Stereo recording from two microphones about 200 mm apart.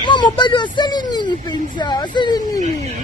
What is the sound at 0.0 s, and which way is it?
A child's voice, 20° left (ahead or behind).